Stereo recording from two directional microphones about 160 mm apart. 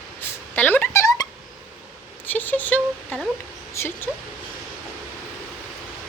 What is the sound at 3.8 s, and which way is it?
Speech, 15° left (ahead or behind).